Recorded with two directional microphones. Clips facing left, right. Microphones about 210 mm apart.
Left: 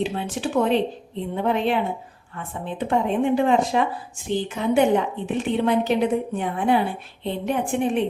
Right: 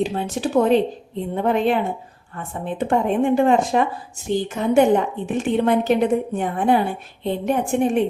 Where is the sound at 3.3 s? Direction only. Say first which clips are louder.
Right 3 dB; 50° right (ahead or behind).